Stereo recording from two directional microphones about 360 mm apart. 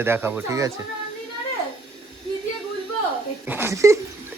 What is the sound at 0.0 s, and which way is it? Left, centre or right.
Speech, centre.